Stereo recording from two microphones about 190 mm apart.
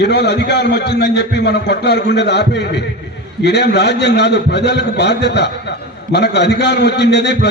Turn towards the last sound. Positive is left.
turn(degrees=65)  # may be behind; listen again after turning